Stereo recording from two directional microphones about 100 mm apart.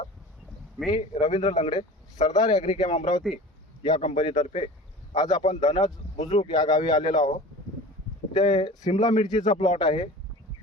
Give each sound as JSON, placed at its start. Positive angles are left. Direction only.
{"t": 0.9, "sound": "speech", "side_deg": 40}
{"t": 4.3, "sound": "speech", "side_deg": 70}
{"t": 5.1, "sound": "speech", "side_deg": 40}
{"t": 8.4, "sound": "speech", "side_deg": 50}
{"t": 9.6, "sound": "speech", "side_deg": 55}